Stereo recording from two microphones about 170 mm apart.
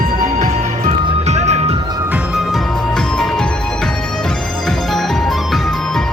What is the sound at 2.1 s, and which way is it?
Music, 5° right (ahead or behind).